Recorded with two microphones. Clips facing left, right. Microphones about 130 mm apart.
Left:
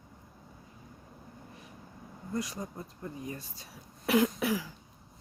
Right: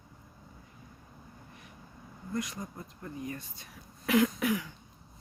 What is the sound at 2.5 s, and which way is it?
Speech, 10° left (ahead or behind).